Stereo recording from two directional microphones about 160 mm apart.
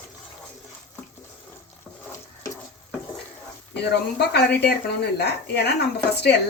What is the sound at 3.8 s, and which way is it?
Speech, 90° left.